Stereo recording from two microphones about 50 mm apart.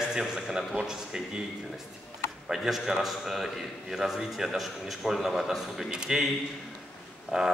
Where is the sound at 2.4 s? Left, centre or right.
Centre.